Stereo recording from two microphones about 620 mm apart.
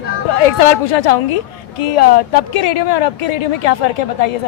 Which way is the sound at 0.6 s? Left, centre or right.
Left.